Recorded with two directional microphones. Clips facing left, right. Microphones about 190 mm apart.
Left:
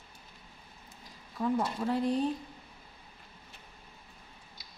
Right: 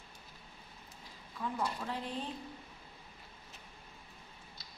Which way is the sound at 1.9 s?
40° left (ahead or behind).